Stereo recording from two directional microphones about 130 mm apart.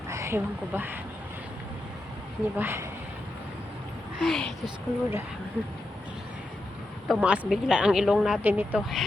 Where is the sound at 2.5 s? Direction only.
15° right (ahead or behind).